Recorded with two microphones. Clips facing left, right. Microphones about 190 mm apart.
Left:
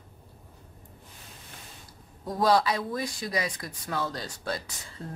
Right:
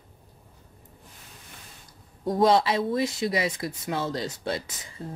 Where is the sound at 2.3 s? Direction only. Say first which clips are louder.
Right 3 dB; 25° right (ahead or behind).